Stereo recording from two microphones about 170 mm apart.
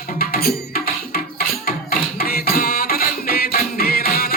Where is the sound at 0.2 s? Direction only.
60° left (ahead or behind).